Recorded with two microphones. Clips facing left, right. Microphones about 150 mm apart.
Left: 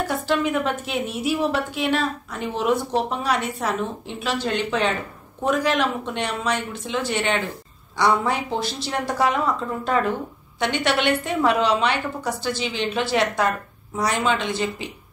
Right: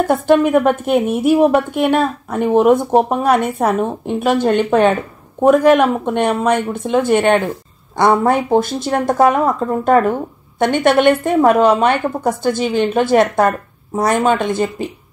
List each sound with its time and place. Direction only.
0.0 s a woman's voice: 55° right (ahead or behind)